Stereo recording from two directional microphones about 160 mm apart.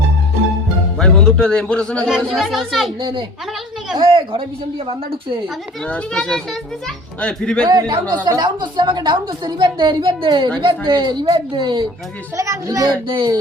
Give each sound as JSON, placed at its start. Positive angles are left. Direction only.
{"t": 0.9, "sound": "speech", "side_deg": 5}
{"t": 3.0, "sound": "a woman's voice", "side_deg": -30}
{"t": 5.8, "sound": "speech", "side_deg": 5}
{"t": 7.7, "sound": "a woman's voice", "side_deg": -25}